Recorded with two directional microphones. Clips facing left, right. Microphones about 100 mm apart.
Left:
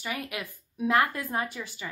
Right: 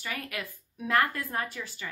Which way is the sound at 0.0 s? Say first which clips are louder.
Left 2 dB; 20° left (ahead or behind).